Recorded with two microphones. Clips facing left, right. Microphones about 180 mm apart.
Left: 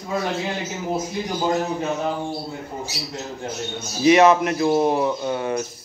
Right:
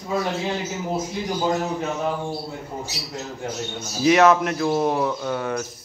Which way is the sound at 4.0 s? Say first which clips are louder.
Left 2 dB; centre (ahead or behind).